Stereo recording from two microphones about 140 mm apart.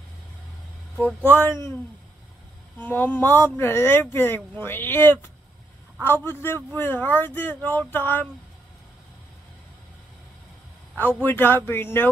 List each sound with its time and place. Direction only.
0.9 s speech: 15° left (ahead or behind)
2.8 s speech: 15° left (ahead or behind)
11.0 s speech: 15° left (ahead or behind)